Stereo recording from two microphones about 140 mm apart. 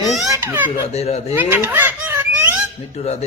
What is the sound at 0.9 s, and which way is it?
Speech, 50° left (ahead or behind).